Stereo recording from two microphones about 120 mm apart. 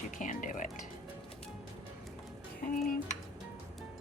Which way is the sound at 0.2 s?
90° left.